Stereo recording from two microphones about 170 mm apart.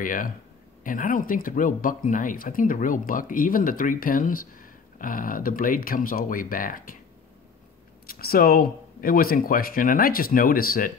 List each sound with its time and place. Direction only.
0.0 s speech: 55° left (ahead or behind)
8.1 s speech: 60° left (ahead or behind)